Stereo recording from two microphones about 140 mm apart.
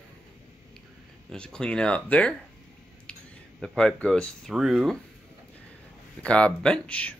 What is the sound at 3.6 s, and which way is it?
Speech, 5° left (ahead or behind).